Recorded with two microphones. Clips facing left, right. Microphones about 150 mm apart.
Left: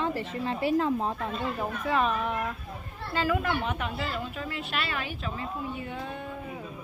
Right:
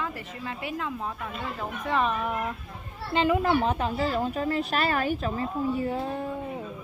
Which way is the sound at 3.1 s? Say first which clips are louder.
Right 5 dB; 25° right (ahead or behind).